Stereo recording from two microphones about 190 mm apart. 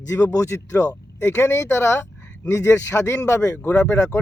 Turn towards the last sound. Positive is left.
turn(degrees=15)  # may be behind; listen again after turning